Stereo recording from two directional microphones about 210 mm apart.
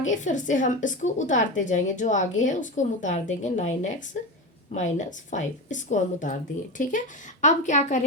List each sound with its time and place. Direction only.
0.1 s a woman's voice: 35° left (ahead or behind)